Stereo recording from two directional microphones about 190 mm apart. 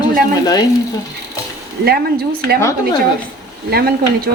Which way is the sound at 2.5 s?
15° left (ahead or behind).